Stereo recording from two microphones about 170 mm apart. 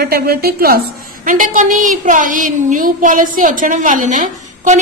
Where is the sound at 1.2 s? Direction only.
50° right (ahead or behind).